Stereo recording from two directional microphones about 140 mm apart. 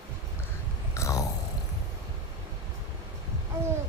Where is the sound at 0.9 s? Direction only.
20° left (ahead or behind).